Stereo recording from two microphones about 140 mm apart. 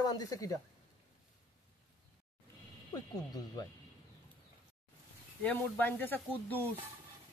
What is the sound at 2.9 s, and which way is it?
Speech, 25° left (ahead or behind).